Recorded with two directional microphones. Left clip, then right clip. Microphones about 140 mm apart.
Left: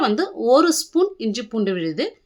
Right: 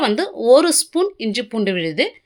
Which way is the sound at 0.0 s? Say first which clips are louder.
Right 2 dB; 15° right (ahead or behind).